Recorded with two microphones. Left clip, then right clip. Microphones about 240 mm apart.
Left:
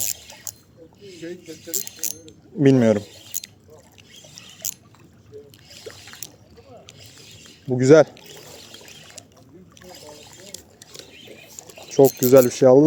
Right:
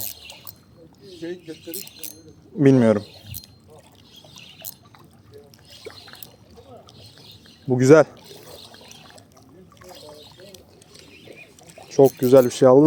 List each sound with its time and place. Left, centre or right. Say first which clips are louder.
2.6 s speech: even; centre
3.0 s a sound: left 4 dB; left
7.8 s speech: even; centre
11.9 s speech: even; centre